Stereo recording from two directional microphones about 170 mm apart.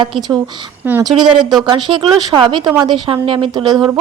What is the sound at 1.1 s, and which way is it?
Speech, centre (ahead or behind).